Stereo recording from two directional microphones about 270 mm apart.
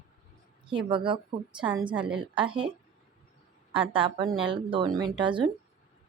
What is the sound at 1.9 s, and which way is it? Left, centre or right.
Speech, centre.